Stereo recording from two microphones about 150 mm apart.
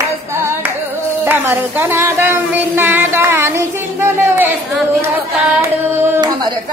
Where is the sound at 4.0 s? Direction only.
15° right (ahead or behind).